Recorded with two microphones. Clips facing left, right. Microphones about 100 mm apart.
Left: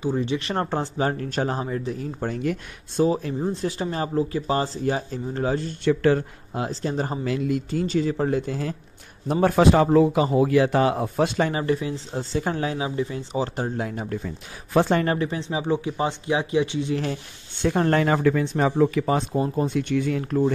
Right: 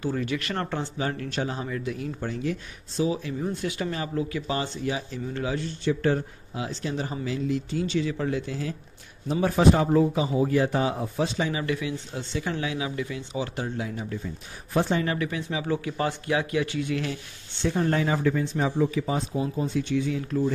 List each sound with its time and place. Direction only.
0.0 s speech: 20° left (ahead or behind); by 3.3 s 45° left (ahead or behind)
3.3 s speech: 30° left (ahead or behind)
5.9 s speech: 80° left
6.7 s speech: 40° left (ahead or behind)
9.3 s a man's voice: 60° left (ahead or behind)
11.6 s speech: 35° left (ahead or behind); by 14.2 s 55° left (ahead or behind)
14.2 s speech: 70° left (ahead or behind)
15.1 s speech: 30° left (ahead or behind)
17.6 s speech: 60° left (ahead or behind)